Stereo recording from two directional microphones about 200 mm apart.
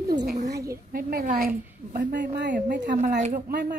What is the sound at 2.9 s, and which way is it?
Speech, 35° right (ahead or behind).